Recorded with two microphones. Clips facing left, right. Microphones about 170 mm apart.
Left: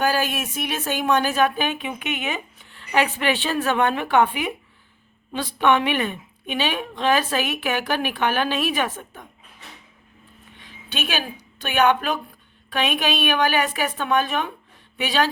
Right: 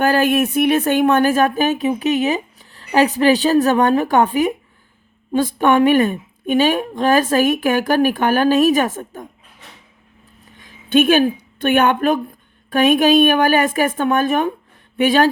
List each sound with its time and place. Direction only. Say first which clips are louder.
0.0 s a woman's voice: right 8 dB; 55° right (ahead or behind)
10.6 s a sound: right 16 dB; 45° right (ahead or behind)
11.6 s a woman's voice: right 5 dB; 50° right (ahead or behind)